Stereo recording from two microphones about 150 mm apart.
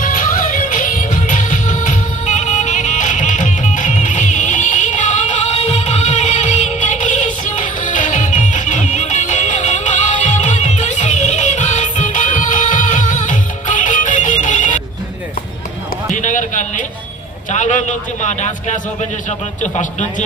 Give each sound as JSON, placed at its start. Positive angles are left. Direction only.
{"t": 0.0, "sound": "music", "side_deg": 65}
{"t": 16.1, "sound": "basketball bounce", "side_deg": 55}
{"t": 17.5, "sound": "a sound", "side_deg": 55}
{"t": 19.6, "sound": "speech", "side_deg": 55}